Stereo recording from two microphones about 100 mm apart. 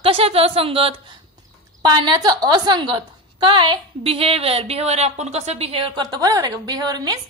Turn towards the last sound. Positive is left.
turn(degrees=-40)  # may be behind; listen again after turning